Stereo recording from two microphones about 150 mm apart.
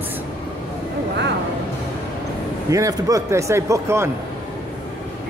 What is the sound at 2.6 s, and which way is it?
A man's voice, 20° right (ahead or behind).